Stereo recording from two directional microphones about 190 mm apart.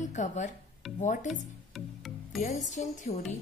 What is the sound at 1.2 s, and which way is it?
Music, centre (ahead or behind).